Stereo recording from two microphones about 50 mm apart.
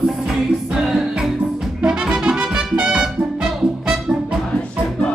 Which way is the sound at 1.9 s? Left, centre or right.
Centre.